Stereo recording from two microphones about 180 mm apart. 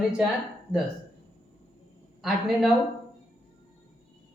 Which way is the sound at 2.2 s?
Centre (ahead or behind).